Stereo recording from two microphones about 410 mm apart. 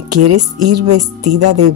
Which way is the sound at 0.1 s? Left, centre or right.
Right.